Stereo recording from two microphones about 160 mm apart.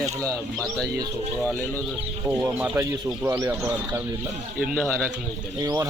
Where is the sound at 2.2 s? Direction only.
15° right (ahead or behind).